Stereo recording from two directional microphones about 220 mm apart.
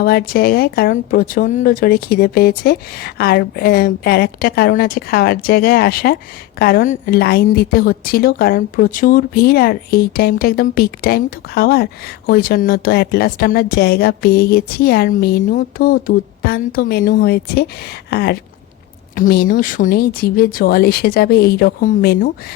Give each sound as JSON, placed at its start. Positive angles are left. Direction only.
{"t": 0.0, "sound": "a woman's voice", "side_deg": 45}